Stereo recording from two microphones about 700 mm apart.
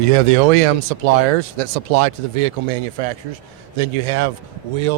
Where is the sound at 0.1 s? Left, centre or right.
Right.